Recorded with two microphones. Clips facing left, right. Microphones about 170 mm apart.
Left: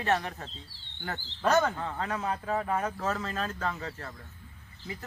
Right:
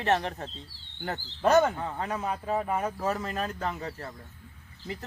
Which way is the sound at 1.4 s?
15° right (ahead or behind).